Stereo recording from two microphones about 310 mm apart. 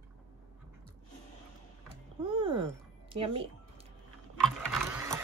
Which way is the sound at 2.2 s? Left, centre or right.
Centre.